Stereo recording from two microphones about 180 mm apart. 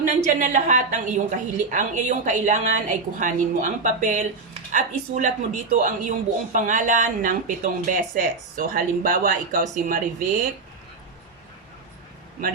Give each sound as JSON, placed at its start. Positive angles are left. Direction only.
{"t": 0.0, "sound": "speech", "side_deg": -45}